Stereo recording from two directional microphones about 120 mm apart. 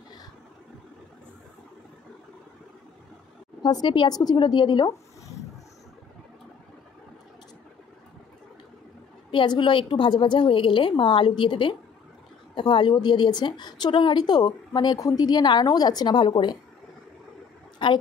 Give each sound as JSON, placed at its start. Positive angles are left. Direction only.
{"t": 3.6, "sound": "speech", "side_deg": 40}
{"t": 9.3, "sound": "a woman's voice", "side_deg": 45}
{"t": 17.8, "sound": "a woman's voice", "side_deg": 45}